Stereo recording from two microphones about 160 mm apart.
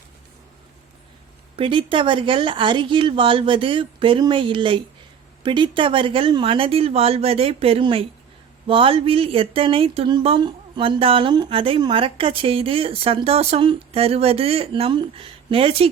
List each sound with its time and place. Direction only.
1.5 s speech: 35° right (ahead or behind)